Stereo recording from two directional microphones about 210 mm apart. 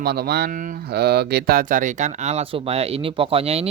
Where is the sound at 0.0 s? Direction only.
50° right (ahead or behind).